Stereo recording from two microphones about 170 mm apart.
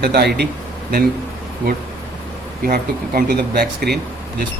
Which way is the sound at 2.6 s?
65° right (ahead or behind).